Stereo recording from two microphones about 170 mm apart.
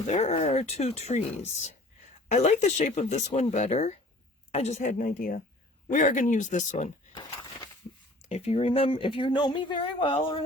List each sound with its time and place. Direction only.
0.1 s speech: 40° left (ahead or behind)
7.1 s a sound: 25° left (ahead or behind)
8.3 s speech: 40° left (ahead or behind)